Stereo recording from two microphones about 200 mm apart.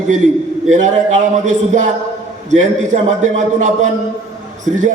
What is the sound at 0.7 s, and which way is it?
A man's voice, 35° right (ahead or behind).